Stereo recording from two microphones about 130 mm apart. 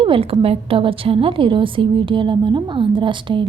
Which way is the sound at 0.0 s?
45° right (ahead or behind).